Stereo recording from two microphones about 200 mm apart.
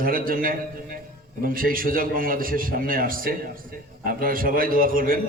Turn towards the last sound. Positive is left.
turn(degrees=-45)  # may be behind; listen again after turning